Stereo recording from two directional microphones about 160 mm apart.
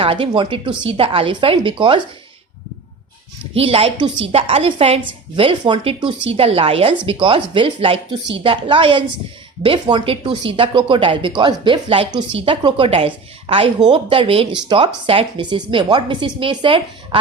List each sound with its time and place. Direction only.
0.0 s speech: 35° right (ahead or behind)
3.5 s speech: 35° right (ahead or behind)